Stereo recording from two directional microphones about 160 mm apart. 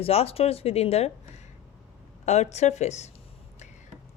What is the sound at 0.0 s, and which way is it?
Speech, 40° left (ahead or behind).